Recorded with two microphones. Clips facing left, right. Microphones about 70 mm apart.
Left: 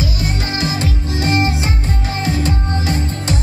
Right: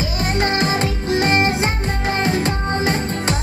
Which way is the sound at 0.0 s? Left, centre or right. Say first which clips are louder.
Right 2 dB; right.